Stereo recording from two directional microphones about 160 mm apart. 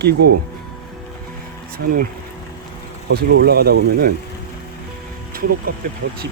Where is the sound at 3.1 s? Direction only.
80° right.